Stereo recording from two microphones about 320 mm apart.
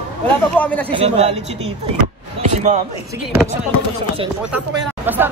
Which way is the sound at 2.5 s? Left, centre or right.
Right.